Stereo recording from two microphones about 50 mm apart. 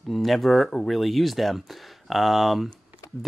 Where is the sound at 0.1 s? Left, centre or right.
Centre.